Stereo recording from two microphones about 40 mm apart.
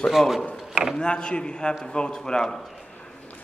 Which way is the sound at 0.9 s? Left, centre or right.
Left.